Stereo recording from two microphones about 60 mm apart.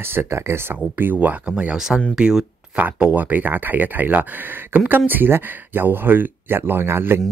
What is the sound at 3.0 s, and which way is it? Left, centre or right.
Speech, right.